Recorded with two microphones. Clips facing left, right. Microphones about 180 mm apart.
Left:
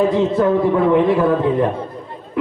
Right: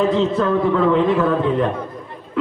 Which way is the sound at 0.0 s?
20° left (ahead or behind).